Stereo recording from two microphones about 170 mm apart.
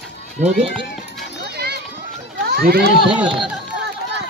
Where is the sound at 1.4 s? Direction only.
70° right (ahead or behind).